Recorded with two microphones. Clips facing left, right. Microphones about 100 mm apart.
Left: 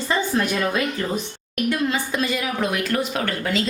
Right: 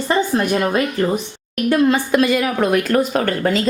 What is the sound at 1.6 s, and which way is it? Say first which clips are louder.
A woman's voice: right 8 dB; 65° right (ahead or behind).